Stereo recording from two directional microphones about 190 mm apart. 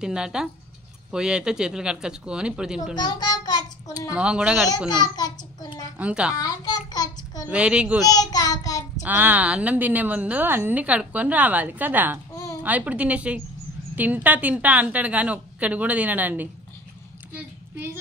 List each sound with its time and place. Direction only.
0.0 s speech: 5° right (ahead or behind)
3.0 s a sound: 20° left (ahead or behind)
4.1 s speech: 5° right (ahead or behind)
4.6 s a child's voice: 20° left (ahead or behind)
5.9 s a woman's voice: 5° right (ahead or behind)
6.3 s a sound: 20° left (ahead or behind)
7.4 s a woman's voice: 5° right (ahead or behind)
8.0 s child singing: 20° left (ahead or behind)
9.0 s a woman's voice: 10° right (ahead or behind)
17.3 s child singing: 10° right (ahead or behind)